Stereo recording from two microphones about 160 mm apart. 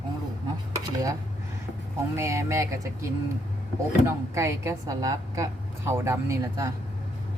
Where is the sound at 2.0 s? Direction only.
15° right (ahead or behind).